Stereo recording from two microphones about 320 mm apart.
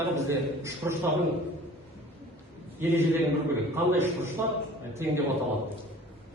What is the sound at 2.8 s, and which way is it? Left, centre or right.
A man's voice, centre.